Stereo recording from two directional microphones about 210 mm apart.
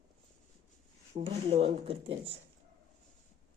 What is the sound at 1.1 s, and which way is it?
Speech, 25° right (ahead or behind).